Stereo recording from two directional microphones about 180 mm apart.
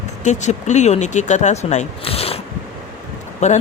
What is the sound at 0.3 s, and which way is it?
Speech, 40° left (ahead or behind).